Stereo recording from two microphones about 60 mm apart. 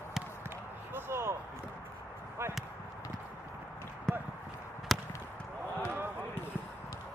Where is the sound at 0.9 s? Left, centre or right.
Right.